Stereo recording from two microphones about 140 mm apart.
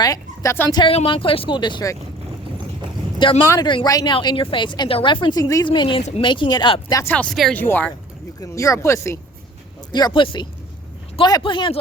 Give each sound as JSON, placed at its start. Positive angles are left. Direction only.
{"t": 0.0, "sound": "a sound", "side_deg": 25}
{"t": 0.7, "sound": "speech", "side_deg": 35}
{"t": 3.2, "sound": "speech", "side_deg": 40}
{"t": 3.5, "sound": "speech", "side_deg": 25}
{"t": 5.6, "sound": "speech", "side_deg": 35}
{"t": 7.0, "sound": "speech", "side_deg": 10}
{"t": 8.4, "sound": "speech", "side_deg": 25}
{"t": 9.9, "sound": "speech", "side_deg": 35}